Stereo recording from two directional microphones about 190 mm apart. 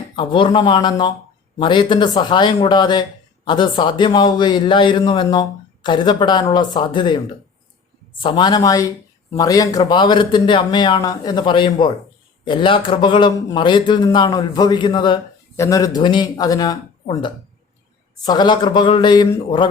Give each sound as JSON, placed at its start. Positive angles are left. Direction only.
{"t": 0.2, "sound": "speech", "side_deg": 25}
{"t": 8.2, "sound": "speech", "side_deg": 25}